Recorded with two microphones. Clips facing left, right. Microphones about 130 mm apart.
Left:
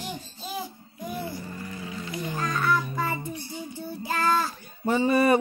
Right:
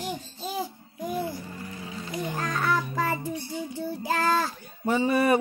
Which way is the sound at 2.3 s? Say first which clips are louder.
Left 3 dB; 65° right (ahead or behind).